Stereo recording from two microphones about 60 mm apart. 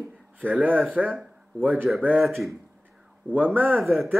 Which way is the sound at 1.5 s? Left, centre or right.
Right.